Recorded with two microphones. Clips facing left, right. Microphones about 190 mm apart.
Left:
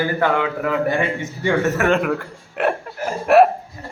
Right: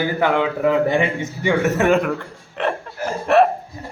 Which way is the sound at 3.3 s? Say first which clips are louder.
Left 2 dB; 10° left (ahead or behind).